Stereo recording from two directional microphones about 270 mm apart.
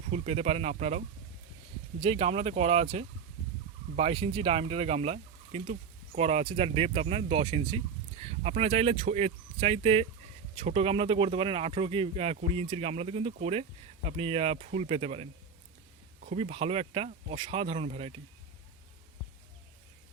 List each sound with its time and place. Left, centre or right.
0.1 s speech: right